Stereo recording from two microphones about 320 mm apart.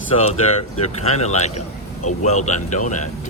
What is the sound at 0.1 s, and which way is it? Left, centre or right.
Speech, centre.